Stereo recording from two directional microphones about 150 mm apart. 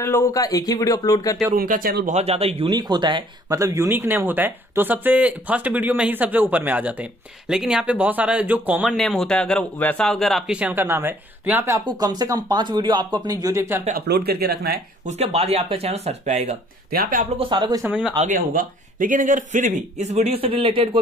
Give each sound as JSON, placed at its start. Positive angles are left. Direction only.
{"t": 0.0, "sound": "speech", "side_deg": 20}
{"t": 1.5, "sound": "speech", "side_deg": -70}
{"t": 2.1, "sound": "a man's voice", "side_deg": -40}
{"t": 2.7, "sound": "speech", "side_deg": -25}
{"t": 3.5, "sound": "speech", "side_deg": -20}
{"t": 8.9, "sound": "speech", "side_deg": 0}
{"t": 11.8, "sound": "speech", "side_deg": -25}
{"t": 13.9, "sound": "speech", "side_deg": -90}
{"t": 15.0, "sound": "a man's voice", "side_deg": -45}
{"t": 16.9, "sound": "speech", "side_deg": -80}
{"t": 17.4, "sound": "a man's voice", "side_deg": -30}
{"t": 17.8, "sound": "speech", "side_deg": -5}
{"t": 18.2, "sound": "a man's voice", "side_deg": -65}